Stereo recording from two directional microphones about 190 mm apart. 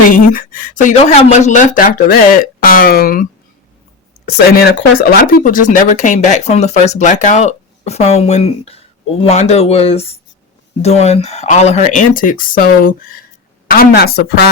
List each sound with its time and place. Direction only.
0.1 s speech: 45° left (ahead or behind)
4.3 s a woman's voice: 55° left (ahead or behind)